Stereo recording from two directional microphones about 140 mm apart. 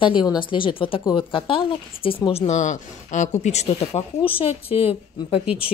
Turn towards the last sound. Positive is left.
turn(degrees=-10)  # may be behind; listen again after turning